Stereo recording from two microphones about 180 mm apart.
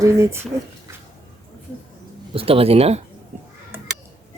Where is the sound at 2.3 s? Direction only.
30° right (ahead or behind).